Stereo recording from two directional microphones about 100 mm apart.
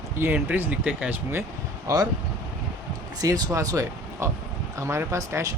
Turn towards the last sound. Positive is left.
turn(degrees=-30)  # may be behind; listen again after turning